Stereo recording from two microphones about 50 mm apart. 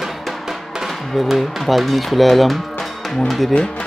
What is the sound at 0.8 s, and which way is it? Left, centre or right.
Speech, centre.